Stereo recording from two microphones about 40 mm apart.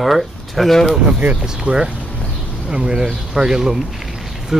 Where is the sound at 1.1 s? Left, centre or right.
Right.